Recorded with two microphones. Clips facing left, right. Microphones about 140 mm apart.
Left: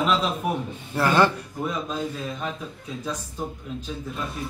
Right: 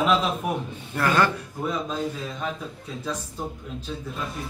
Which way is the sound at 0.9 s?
25° left (ahead or behind).